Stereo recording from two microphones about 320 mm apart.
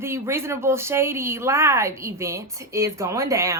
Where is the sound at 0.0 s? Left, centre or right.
Centre.